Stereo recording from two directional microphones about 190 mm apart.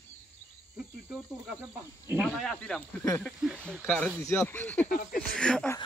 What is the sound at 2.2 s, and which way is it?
Speech, 5° left (ahead or behind).